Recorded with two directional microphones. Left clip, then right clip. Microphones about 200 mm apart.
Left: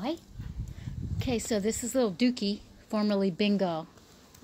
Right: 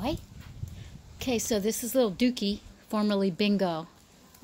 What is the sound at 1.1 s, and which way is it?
A woman's voice, 10° right (ahead or behind).